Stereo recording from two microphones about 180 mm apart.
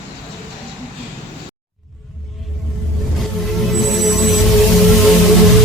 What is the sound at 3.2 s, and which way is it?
Music, centre (ahead or behind).